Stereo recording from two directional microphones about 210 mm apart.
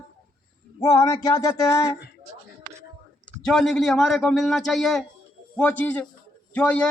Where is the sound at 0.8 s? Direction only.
15° left (ahead or behind).